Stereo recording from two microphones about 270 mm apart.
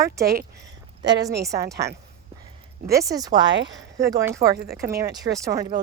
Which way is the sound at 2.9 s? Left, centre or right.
Centre.